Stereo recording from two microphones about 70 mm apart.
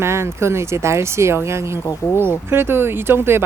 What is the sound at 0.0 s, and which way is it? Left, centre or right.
Speech, right.